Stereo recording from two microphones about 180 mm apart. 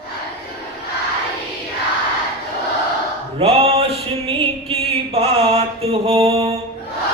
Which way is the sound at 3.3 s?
30° right (ahead or behind).